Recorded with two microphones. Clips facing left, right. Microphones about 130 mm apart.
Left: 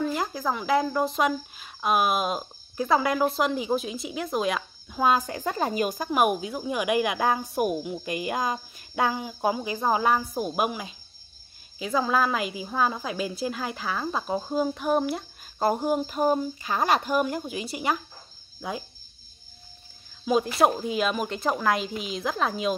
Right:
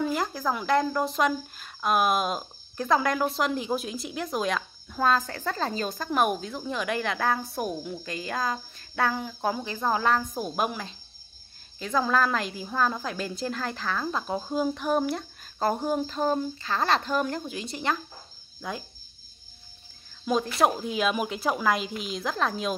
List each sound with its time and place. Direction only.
0.0 s speech: centre (ahead or behind)
20.2 s speech: 5° left (ahead or behind)